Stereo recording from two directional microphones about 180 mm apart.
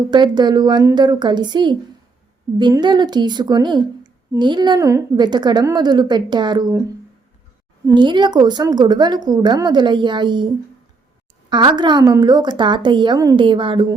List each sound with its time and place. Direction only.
0.1 s a woman's voice: 25° right (ahead or behind)
7.9 s a woman's voice: 25° right (ahead or behind)